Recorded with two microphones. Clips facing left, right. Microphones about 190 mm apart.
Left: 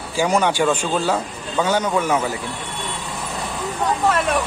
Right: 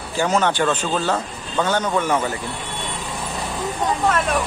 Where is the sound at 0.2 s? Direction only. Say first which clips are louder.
Left 1 dB; 10° left (ahead or behind).